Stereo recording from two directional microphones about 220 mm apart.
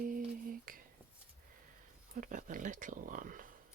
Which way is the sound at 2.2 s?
35° right (ahead or behind).